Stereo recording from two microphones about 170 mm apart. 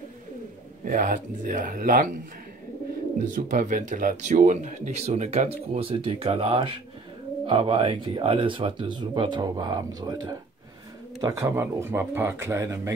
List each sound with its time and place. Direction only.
0.8 s speech: 55° right (ahead or behind)
3.3 s speech: 50° right (ahead or behind); by 12.9 s 15° right (ahead or behind)